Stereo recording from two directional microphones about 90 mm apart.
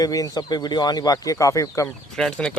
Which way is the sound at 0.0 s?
45° left (ahead or behind).